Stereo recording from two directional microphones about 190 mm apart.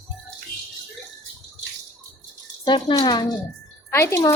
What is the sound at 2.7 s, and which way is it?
A child's voice, 25° left (ahead or behind).